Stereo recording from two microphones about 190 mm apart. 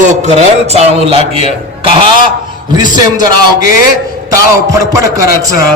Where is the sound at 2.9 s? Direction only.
20° right (ahead or behind).